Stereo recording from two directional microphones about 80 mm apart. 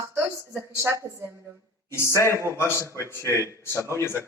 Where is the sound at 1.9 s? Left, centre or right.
Left.